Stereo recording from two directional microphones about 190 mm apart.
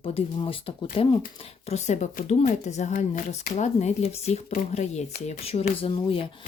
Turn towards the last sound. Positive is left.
turn(degrees=30)  # may be behind; listen again after turning